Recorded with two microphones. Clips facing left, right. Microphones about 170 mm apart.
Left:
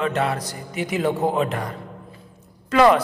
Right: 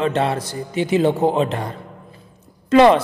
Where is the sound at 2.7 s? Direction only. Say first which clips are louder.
Right 4 dB; 25° right (ahead or behind).